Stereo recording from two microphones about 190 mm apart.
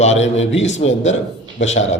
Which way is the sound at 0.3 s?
80° left.